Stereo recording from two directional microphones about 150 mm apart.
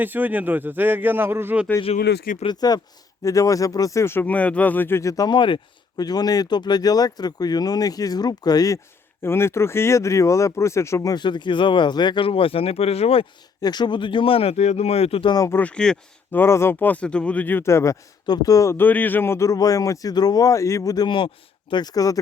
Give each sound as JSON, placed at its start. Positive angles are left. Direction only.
{"t": 0.0, "sound": "a man's voice", "side_deg": -10}
{"t": 2.0, "sound": "speech", "side_deg": 80}
{"t": 2.4, "sound": "speech", "side_deg": 30}
{"t": 13.6, "sound": "speech", "side_deg": 30}
{"t": 15.4, "sound": "speech", "side_deg": 10}